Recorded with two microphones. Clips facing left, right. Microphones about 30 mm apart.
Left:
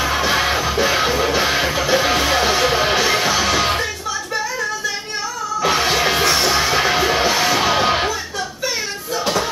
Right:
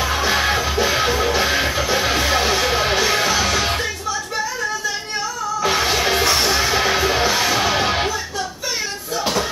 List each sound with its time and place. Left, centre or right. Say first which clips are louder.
0.0 s music: left 1 dB; centre
5.6 s music: left 2 dB; centre
6.2 s music: left 1 dB; centre
9.2 s music: left 1 dB; centre